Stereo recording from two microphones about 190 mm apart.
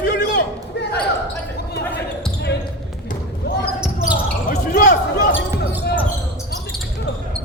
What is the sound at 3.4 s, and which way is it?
Basketball bounce, 55° left (ahead or behind).